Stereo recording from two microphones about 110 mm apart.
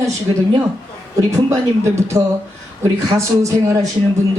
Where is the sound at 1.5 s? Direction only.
25° right (ahead or behind).